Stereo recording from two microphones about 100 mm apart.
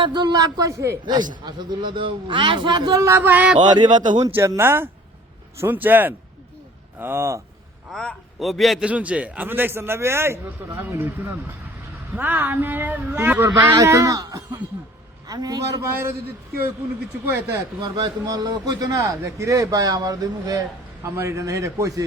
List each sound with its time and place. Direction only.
0.0 s a man's voice: 50° right (ahead or behind)
2.9 s a man's voice: 30° right (ahead or behind); by 3.6 s 15° right (ahead or behind)
3.6 s a man's voice: 45° right (ahead or behind)
4.4 s a man's voice: 25° right (ahead or behind)
7.9 s a man's voice: centre (ahead or behind)
8.9 s a man's voice: 15° right (ahead or behind)
13.8 s a man's voice: 30° right (ahead or behind)
17.7 s a man's voice: 45° right (ahead or behind)
21.0 s a man's voice: 30° right (ahead or behind)